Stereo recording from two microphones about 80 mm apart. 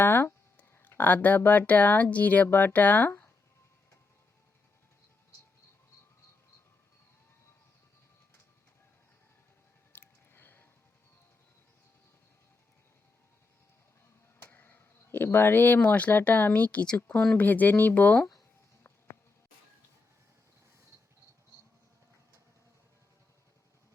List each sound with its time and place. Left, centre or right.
0.0 s speech: left
9.9 s music: left
14.4 s speech: left